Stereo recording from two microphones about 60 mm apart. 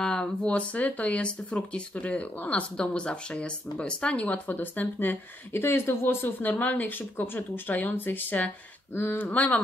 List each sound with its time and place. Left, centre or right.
0.0 s speech: centre
4.5 s speech: left
5.5 s speech: left